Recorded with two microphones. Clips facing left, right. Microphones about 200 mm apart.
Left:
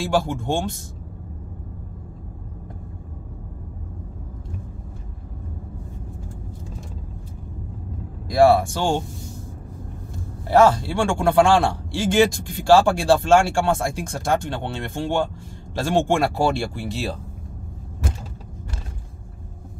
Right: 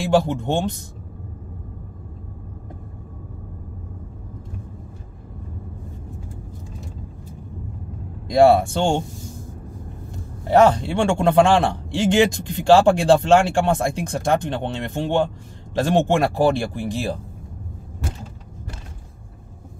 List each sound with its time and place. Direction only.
0.0 s a man's voice: 20° right (ahead or behind)
8.5 s a man's voice: 25° right (ahead or behind)
10.4 s a man's voice: 20° right (ahead or behind)